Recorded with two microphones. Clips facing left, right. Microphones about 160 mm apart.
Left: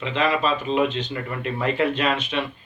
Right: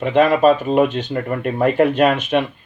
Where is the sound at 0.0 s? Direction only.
50° right (ahead or behind).